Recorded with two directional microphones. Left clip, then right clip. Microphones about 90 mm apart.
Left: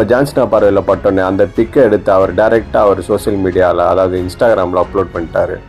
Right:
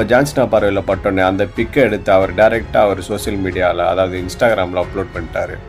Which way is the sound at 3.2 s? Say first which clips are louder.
Left 6 dB; 25° right (ahead or behind).